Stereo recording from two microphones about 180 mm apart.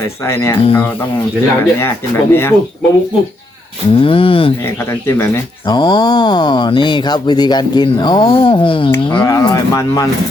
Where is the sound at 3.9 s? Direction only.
30° left (ahead or behind).